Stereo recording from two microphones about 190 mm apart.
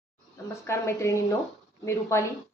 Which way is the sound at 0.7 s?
15° left (ahead or behind).